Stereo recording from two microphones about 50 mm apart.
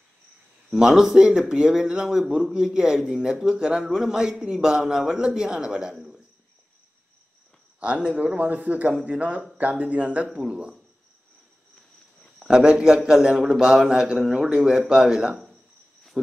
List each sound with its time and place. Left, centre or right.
0.7 s a man's voice: centre
7.8 s speech: right
12.4 s a man's voice: centre